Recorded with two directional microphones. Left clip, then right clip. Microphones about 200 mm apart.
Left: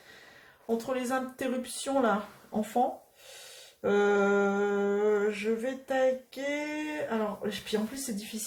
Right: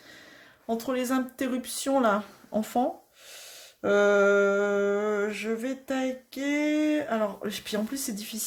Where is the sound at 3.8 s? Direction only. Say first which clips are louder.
Right 4 dB; 50° right (ahead or behind).